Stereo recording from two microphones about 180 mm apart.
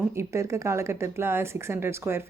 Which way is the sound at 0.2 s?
15° right (ahead or behind).